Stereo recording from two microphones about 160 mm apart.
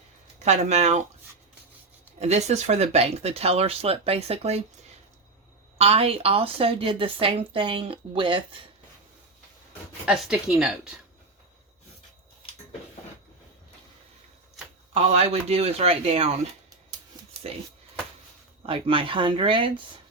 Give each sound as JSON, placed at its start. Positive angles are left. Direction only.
{"t": 0.4, "sound": "speech", "side_deg": -45}
{"t": 2.1, "sound": "a woman's voice", "side_deg": -45}
{"t": 5.7, "sound": "a woman's voice", "side_deg": -40}
{"t": 10.1, "sound": "speech", "side_deg": -5}
{"t": 14.9, "sound": "a woman's voice", "side_deg": -40}
{"t": 17.4, "sound": "a woman's voice", "side_deg": -40}
{"t": 18.6, "sound": "a woman's voice", "side_deg": -35}